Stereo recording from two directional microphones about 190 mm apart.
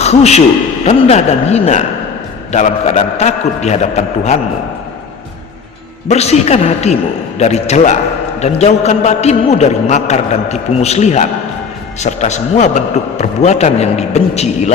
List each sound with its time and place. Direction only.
0.0 s a man's voice: 35° left (ahead or behind)
6.1 s a man's voice: 35° left (ahead or behind)